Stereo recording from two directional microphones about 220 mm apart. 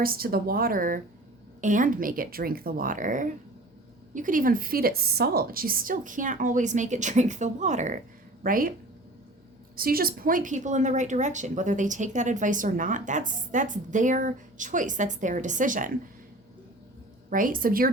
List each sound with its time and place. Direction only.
0.0 s a woman's voice: 40° right (ahead or behind)
9.7 s a woman's voice: 40° right (ahead or behind)
17.2 s a woman's voice: 40° right (ahead or behind)